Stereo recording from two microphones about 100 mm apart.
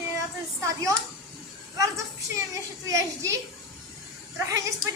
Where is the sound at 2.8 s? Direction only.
30° right (ahead or behind).